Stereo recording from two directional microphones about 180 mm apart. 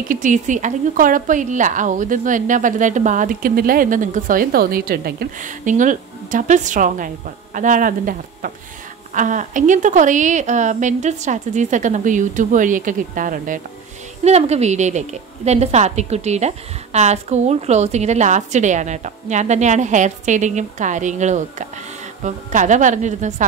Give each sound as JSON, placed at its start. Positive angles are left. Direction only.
{"t": 0.1, "sound": "speech", "side_deg": -45}
{"t": 14.2, "sound": "a woman's voice", "side_deg": -35}